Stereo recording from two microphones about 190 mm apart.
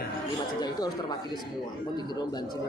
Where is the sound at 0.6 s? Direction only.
20° left (ahead or behind).